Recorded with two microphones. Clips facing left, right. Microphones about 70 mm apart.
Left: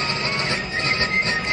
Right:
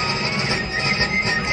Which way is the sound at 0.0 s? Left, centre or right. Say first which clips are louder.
Right 1 dB; centre.